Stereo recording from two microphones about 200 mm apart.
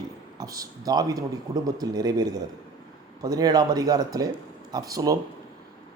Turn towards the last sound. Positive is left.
turn(degrees=-15)  # may be behind; listen again after turning